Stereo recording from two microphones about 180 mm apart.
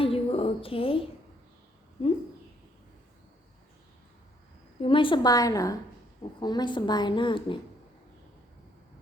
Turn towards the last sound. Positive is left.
turn(degrees=25)  # may be behind; listen again after turning